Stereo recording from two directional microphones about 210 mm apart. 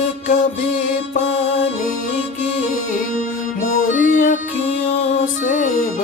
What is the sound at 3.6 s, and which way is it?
Music, 40° left (ahead or behind).